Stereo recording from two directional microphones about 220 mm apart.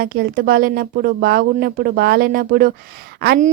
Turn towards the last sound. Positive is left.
turn(degrees=-40)  # may be behind; listen again after turning